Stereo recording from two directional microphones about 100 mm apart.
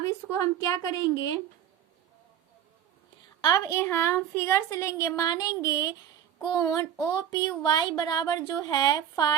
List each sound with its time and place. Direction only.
0.6 s speech: 35° left (ahead or behind)
3.4 s speech: 35° left (ahead or behind)